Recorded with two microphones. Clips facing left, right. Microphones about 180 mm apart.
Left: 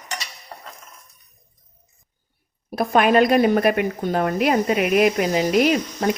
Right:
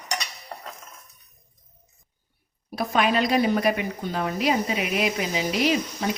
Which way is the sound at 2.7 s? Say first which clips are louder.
Left 6 dB; 50° left (ahead or behind).